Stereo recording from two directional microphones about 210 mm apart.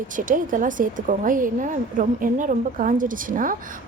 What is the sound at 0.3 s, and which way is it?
A woman's voice, 40° right (ahead or behind).